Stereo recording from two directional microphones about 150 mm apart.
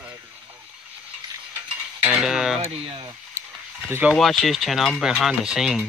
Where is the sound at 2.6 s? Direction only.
35° right (ahead or behind).